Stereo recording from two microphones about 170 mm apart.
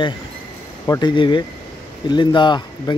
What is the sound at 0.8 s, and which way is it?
Speech, 25° left (ahead or behind).